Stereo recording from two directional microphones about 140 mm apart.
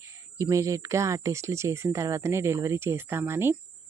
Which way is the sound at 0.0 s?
20° right (ahead or behind).